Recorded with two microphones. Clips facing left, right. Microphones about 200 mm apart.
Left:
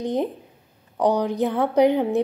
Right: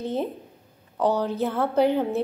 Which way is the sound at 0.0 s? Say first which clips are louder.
Left 3 dB; 15° left (ahead or behind).